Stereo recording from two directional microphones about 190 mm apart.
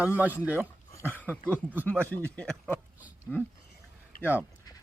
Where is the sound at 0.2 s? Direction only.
10° right (ahead or behind).